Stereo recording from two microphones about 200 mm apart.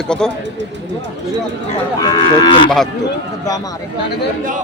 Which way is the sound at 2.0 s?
20° left (ahead or behind).